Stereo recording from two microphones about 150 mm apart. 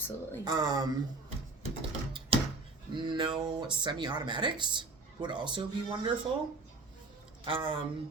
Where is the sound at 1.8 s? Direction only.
35° right (ahead or behind).